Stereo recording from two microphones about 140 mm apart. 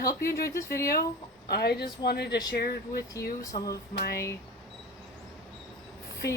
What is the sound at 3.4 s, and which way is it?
Speech, 25° left (ahead or behind).